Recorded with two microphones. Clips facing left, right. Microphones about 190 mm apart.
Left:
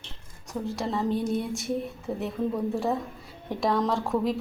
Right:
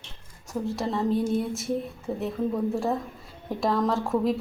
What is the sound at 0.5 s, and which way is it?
A woman's voice, centre (ahead or behind).